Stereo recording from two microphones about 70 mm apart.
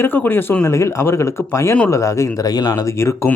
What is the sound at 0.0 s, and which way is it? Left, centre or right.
Speech, left.